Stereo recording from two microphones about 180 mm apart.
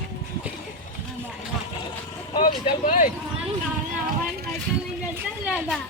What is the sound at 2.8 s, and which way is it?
Speech, 45° left (ahead or behind).